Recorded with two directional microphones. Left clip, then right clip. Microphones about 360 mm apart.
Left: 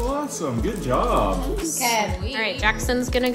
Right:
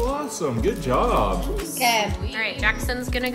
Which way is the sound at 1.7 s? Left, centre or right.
Right.